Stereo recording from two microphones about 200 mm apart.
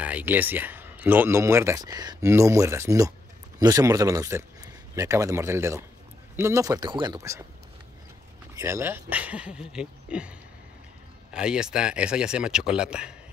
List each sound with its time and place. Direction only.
0.0 s speech: 10° right (ahead or behind)
8.5 s speech: 15° right (ahead or behind)
11.3 s speech: 5° right (ahead or behind)